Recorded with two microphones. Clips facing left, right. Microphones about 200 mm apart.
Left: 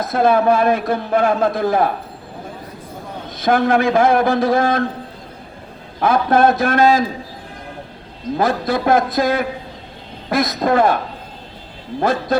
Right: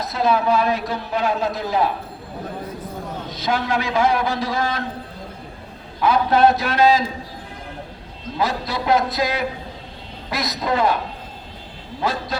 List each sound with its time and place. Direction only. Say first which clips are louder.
0.0 s a man's voice: left 5 dB; 50° left (ahead or behind)
3.2 s a man's voice: left 8 dB; 50° left (ahead or behind)
6.0 s a man's voice: left 2 dB; 50° left (ahead or behind)
8.4 s a man's voice: left 5 dB; 50° left (ahead or behind)